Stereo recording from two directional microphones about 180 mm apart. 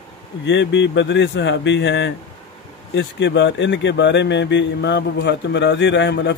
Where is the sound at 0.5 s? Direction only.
85° left.